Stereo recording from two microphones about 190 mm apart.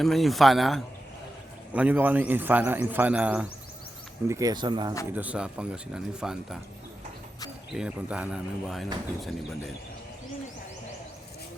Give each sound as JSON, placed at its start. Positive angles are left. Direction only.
{"t": 0.0, "sound": "a man's voice", "side_deg": 0}
{"t": 4.3, "sound": "speech", "side_deg": -15}
{"t": 5.1, "sound": "speech", "side_deg": -5}
{"t": 7.7, "sound": "speech", "side_deg": -5}